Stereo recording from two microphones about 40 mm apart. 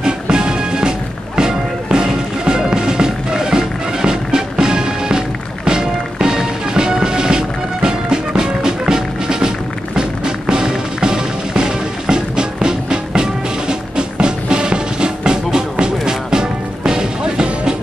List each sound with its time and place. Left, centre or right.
0.0 s music: centre